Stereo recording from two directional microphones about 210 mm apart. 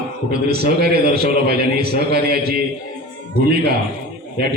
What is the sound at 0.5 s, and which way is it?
A man's voice, 50° right (ahead or behind).